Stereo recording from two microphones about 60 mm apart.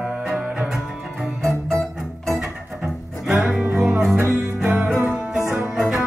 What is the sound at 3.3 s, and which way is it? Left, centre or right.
Music, centre.